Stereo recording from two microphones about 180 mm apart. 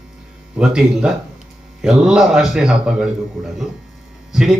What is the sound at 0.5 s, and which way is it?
A man's voice, 5° right (ahead or behind).